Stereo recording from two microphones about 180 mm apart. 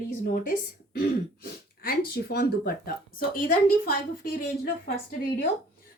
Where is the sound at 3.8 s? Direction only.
50° left (ahead or behind).